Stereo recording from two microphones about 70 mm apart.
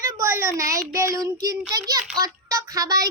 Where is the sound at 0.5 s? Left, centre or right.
Right.